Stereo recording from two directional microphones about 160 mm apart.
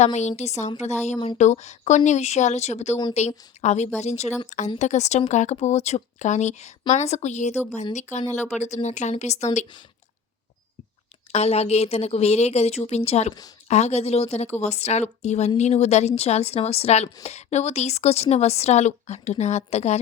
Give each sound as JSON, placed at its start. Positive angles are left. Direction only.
{"t": 0.0, "sound": "a woman's voice", "side_deg": 45}
{"t": 8.5, "sound": "a woman's voice", "side_deg": 45}
{"t": 11.3, "sound": "a woman's voice", "side_deg": 40}